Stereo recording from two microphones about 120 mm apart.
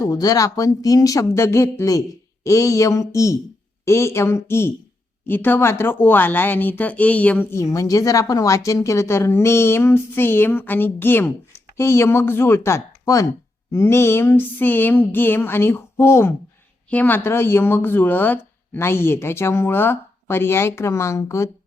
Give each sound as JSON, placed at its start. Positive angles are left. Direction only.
{"t": 0.0, "sound": "speech", "side_deg": 30}